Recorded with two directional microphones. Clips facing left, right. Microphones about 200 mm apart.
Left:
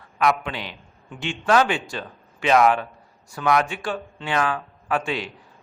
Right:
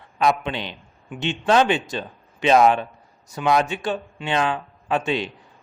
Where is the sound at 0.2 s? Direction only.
25° right (ahead or behind).